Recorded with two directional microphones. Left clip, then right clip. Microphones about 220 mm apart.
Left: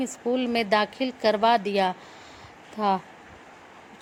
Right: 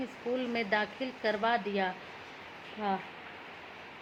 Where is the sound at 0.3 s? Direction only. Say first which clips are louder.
Left 8 dB; 40° left (ahead or behind).